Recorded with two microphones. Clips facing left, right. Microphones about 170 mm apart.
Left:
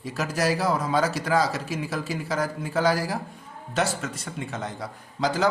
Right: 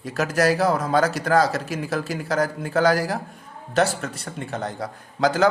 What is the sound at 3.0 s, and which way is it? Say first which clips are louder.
Speech: right 3 dB; 50° right (ahead or behind).